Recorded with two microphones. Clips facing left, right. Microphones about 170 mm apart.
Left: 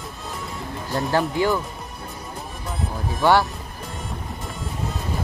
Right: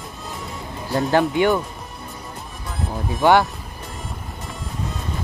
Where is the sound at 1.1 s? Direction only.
20° right (ahead or behind).